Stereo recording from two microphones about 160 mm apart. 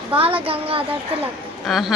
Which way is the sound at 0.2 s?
35° right (ahead or behind).